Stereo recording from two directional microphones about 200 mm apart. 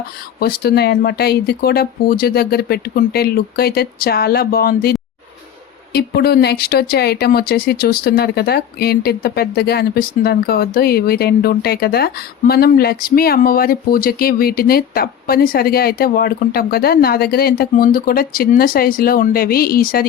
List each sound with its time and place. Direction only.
0.3 s speech: 50° left (ahead or behind)